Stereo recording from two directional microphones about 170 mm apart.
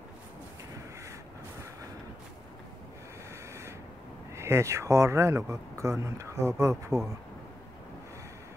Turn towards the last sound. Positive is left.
turn(degrees=-15)  # may be behind; listen again after turning